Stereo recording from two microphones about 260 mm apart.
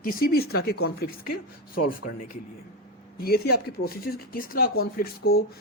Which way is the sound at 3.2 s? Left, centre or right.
Left.